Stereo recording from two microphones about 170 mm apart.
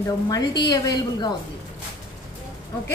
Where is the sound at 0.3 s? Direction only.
25° left (ahead or behind).